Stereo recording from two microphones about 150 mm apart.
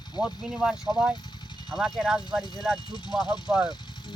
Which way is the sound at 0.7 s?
30° left (ahead or behind).